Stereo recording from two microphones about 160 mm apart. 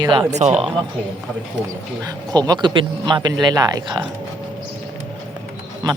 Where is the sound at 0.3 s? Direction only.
45° right (ahead or behind).